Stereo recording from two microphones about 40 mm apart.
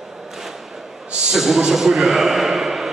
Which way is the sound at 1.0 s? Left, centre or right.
Right.